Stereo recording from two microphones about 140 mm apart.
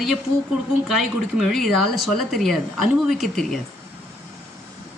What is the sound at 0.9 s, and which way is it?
Speech, centre (ahead or behind).